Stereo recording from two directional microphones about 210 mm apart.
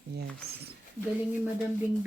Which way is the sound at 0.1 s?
50° right (ahead or behind).